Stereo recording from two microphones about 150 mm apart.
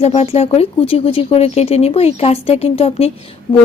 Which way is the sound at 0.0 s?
40° left (ahead or behind).